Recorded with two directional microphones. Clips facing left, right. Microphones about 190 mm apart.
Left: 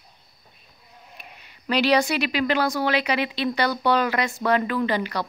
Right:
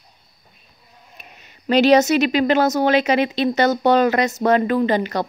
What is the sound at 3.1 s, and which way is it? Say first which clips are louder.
Speech: right 6 dB; 45° right (ahead or behind).